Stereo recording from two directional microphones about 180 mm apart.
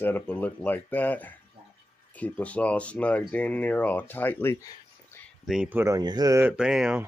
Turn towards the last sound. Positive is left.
turn(degrees=-5)  # may be behind; listen again after turning